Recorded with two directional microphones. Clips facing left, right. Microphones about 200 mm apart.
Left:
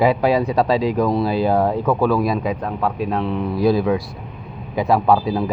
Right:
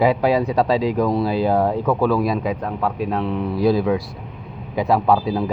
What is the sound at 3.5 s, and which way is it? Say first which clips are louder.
Speech: left 1 dB; 25° right (ahead or behind).